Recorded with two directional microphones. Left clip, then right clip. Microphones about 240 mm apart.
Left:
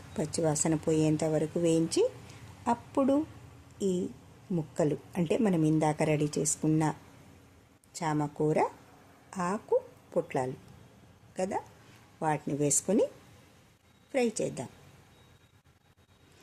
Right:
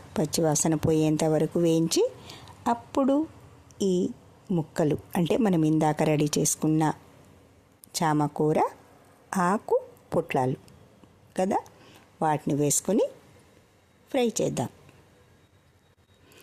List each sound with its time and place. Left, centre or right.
0.1 s speech: right
7.9 s a woman's voice: right
14.1 s speech: right